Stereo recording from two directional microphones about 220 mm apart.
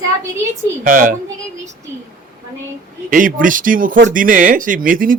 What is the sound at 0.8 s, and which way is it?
Speech, 35° right (ahead or behind).